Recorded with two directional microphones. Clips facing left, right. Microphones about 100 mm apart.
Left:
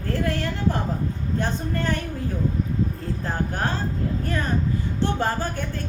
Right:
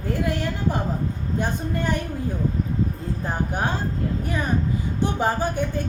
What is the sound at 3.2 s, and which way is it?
A woman's voice, 15° right (ahead or behind).